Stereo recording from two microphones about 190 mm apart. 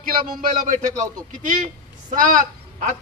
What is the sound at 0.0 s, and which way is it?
Speech, 50° right (ahead or behind).